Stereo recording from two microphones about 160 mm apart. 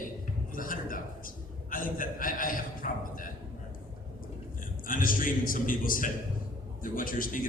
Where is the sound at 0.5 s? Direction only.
60° left (ahead or behind).